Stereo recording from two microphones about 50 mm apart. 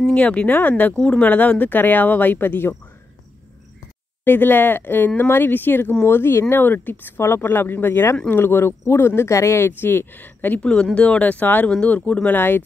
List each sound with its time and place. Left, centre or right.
0.1 s speech: left
4.2 s speech: left
6.5 s speech: left
7.2 s speech: left
9.7 s speech: left
10.6 s speech: centre
12.4 s speech: left